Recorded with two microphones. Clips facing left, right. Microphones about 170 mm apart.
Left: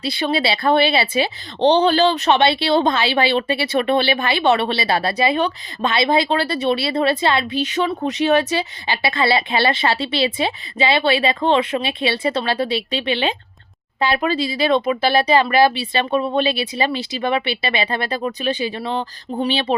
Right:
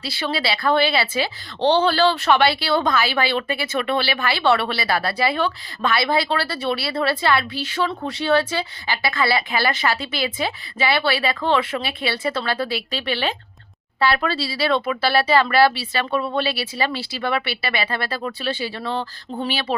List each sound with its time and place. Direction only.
0.0 s speech: 20° left (ahead or behind)